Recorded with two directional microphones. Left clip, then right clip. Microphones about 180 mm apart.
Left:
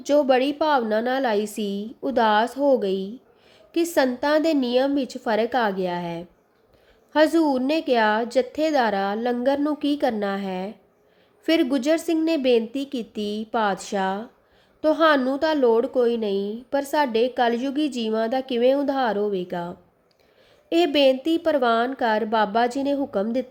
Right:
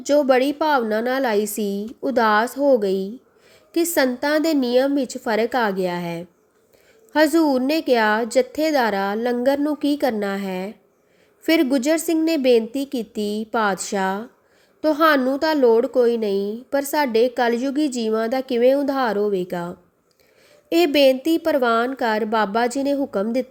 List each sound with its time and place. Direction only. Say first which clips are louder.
0.0 s a woman's voice: right 2 dB; centre (ahead or behind)